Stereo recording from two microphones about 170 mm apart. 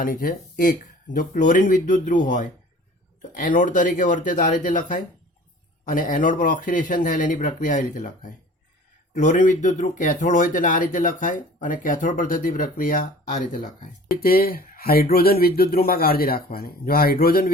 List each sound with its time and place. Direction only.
0.0 s speech: 55° left (ahead or behind)